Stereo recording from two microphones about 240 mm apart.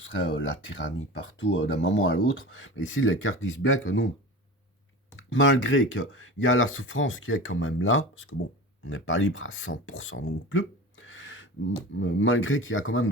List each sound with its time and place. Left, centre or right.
0.1 s speech: left
5.1 s speech: left